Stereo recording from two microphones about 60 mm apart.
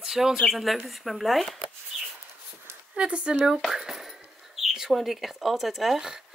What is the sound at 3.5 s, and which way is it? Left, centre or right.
Speech, centre.